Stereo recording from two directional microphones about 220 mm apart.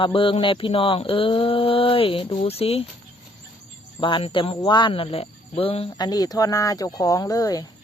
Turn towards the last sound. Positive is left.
turn(degrees=15)  # may be behind; listen again after turning